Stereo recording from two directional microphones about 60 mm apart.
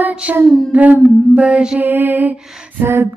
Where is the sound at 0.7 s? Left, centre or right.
Right.